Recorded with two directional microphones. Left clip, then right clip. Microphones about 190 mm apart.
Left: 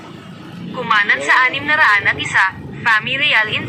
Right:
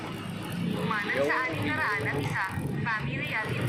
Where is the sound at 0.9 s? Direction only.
50° left (ahead or behind).